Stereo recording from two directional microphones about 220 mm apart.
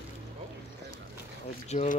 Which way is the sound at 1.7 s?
30° left (ahead or behind).